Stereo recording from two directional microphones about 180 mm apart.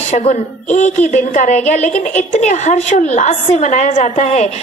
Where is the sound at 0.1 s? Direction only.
40° left (ahead or behind).